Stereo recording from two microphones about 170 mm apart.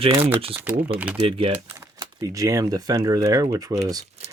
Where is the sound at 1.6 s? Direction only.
15° right (ahead or behind).